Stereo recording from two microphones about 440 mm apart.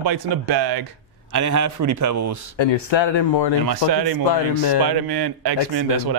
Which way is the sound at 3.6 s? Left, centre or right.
Right.